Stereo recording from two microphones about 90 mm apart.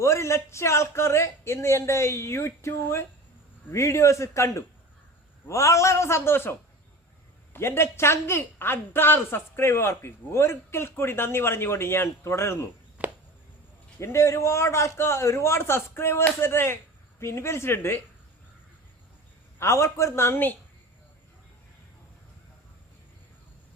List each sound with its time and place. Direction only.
0.0 s speech: 30° left (ahead or behind)
13.0 s a sound: 15° right (ahead or behind)
14.0 s speech: 30° left (ahead or behind)
19.5 s speech: 30° left (ahead or behind)